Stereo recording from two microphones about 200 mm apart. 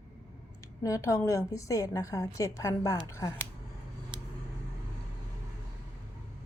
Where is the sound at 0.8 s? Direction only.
15° left (ahead or behind).